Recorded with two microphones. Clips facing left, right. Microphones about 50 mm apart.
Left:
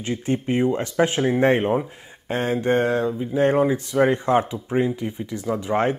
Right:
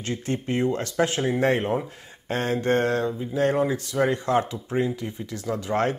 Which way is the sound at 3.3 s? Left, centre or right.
Left.